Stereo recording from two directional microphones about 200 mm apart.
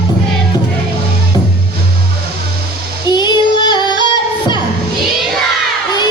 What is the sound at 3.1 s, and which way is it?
Child singing, 20° left (ahead or behind).